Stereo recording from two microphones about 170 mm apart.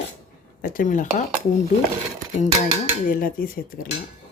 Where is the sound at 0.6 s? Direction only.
50° left (ahead or behind).